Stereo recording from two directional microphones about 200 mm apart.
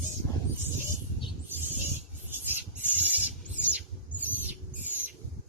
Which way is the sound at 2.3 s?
10° right (ahead or behind).